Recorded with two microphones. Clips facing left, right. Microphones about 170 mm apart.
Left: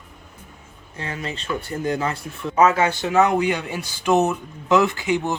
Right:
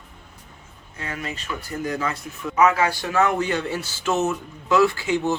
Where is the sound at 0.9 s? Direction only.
30° left (ahead or behind).